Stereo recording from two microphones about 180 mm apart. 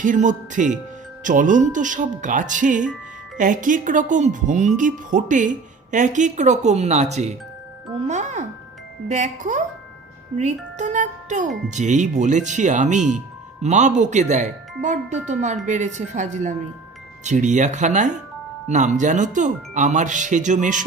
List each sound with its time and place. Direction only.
0.0 s speech: 45° right (ahead or behind)